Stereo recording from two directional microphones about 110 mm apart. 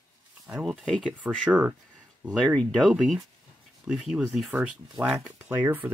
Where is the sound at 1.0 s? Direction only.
15° right (ahead or behind).